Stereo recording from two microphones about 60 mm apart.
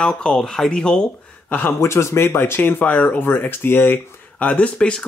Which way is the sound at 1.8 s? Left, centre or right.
Left.